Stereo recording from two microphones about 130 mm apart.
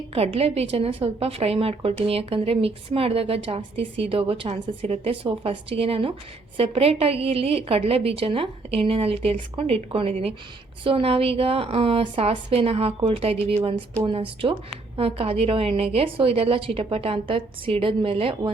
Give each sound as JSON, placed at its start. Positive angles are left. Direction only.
{"t": 0.1, "sound": "a woman's voice", "side_deg": -50}